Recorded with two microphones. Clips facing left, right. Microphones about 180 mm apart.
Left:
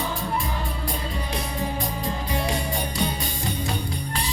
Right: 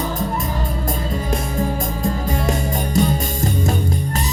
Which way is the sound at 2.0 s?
45° right (ahead or behind).